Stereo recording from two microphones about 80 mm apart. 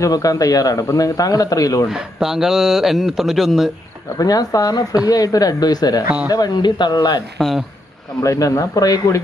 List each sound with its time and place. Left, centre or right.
0.0 s speech: left
1.9 s speech: centre
4.2 s speech: left
7.3 s speech: centre
8.2 s speech: left